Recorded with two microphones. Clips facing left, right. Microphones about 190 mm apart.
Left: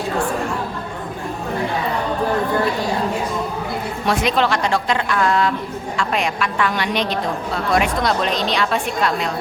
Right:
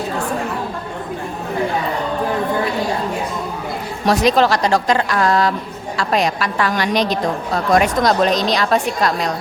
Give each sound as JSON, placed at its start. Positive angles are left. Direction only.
{"t": 4.0, "sound": "a woman's voice", "side_deg": -40}